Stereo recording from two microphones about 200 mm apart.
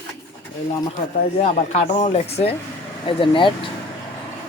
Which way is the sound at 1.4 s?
35° left (ahead or behind).